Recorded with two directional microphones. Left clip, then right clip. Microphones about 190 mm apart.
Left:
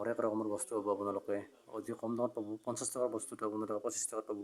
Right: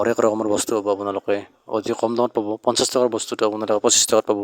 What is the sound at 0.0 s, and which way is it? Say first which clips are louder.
Speech: right 17 dB; 45° right (ahead or behind).